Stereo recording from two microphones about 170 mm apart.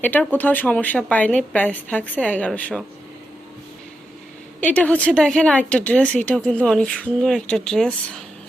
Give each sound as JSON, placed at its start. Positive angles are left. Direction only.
{"t": 0.0, "sound": "speech", "side_deg": 10}
{"t": 4.6, "sound": "speech", "side_deg": 5}